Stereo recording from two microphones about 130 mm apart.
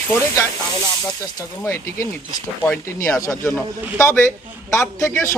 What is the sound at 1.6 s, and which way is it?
A man's voice, 20° left (ahead or behind).